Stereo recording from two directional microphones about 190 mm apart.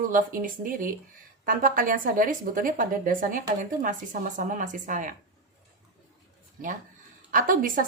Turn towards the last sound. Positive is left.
turn(degrees=-45)  # may be behind; listen again after turning